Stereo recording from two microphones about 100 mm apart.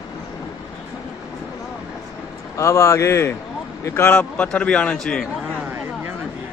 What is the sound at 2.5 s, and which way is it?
A man's voice, 30° left (ahead or behind).